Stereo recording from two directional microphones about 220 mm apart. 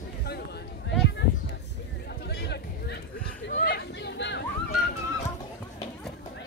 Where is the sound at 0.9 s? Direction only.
50° left (ahead or behind).